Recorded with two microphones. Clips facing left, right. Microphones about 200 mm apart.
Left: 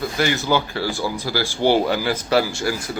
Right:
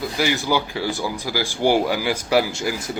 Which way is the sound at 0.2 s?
15° right (ahead or behind).